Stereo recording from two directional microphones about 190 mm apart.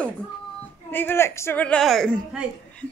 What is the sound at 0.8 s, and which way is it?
A woman's voice, 10° left (ahead or behind).